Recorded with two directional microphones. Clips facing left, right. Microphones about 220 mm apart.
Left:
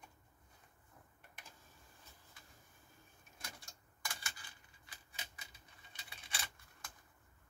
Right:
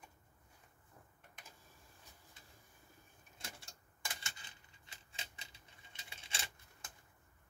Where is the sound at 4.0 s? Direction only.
20° right (ahead or behind).